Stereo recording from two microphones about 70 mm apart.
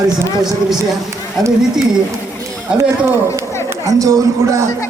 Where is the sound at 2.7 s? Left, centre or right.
Centre.